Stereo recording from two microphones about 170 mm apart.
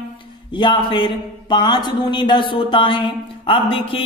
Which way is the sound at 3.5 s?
30° left (ahead or behind).